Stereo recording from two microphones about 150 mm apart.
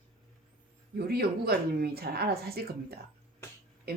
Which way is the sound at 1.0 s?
90° right.